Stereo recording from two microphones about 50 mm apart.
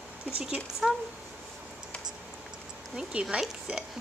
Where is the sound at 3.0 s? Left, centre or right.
Centre.